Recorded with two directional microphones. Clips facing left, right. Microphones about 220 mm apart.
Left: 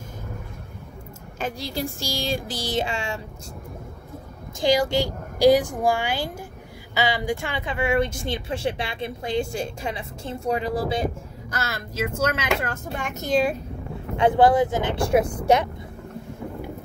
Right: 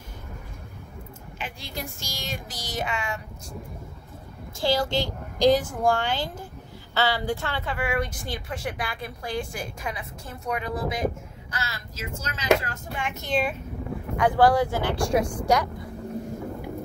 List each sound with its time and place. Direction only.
1.4 s a sound: 35° left (ahead or behind)
4.6 s a woman's voice: 15° left (ahead or behind); by 11.1 s 30° left (ahead or behind)
11.5 s a child's voice: 50° left (ahead or behind)
14.1 s a woman's voice: 25° left (ahead or behind)